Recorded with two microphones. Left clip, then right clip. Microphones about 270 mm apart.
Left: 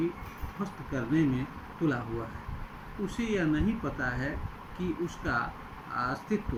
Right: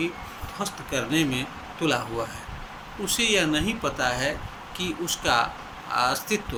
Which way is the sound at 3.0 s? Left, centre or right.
Right.